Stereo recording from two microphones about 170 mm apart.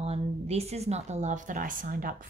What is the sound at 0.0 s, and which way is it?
A woman's voice, 40° right (ahead or behind).